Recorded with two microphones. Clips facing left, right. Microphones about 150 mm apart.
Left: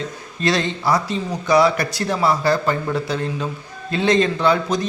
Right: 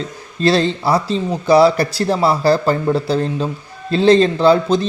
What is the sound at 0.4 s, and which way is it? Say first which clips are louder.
A man's voice: right 5 dB; 30° right (ahead or behind).